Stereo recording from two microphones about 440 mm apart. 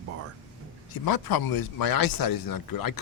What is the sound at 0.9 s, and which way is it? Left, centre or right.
A man's voice, left.